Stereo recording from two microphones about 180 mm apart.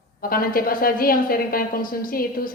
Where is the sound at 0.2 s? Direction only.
55° left (ahead or behind).